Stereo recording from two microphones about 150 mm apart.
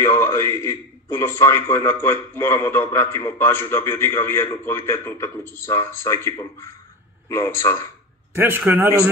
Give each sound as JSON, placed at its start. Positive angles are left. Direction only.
{"t": 0.0, "sound": "a man's voice", "side_deg": 20}
{"t": 8.4, "sound": "speech", "side_deg": -15}